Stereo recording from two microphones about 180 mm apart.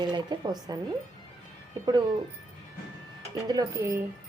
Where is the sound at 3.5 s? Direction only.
20° right (ahead or behind).